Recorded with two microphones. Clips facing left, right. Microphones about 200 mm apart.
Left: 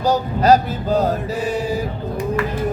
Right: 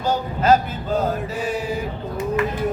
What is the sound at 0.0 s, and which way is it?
Mantra, 40° left (ahead or behind).